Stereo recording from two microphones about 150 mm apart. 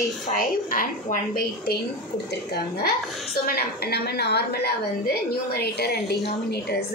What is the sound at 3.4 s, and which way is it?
A woman's voice, 90° left.